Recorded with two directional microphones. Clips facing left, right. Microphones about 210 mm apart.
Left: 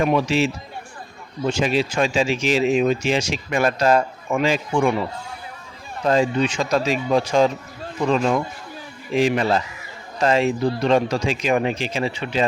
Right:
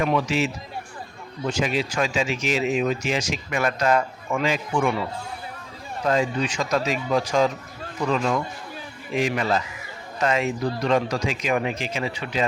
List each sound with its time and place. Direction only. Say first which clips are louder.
0.0 s speech: left 4 dB; 30° left (ahead or behind)
6.1 s speech: left 4 dB; 25° left (ahead or behind)